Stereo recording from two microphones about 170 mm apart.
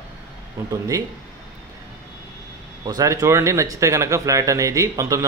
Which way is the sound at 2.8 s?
20° right (ahead or behind).